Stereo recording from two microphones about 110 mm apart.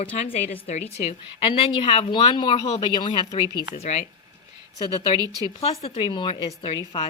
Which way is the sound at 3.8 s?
80° left.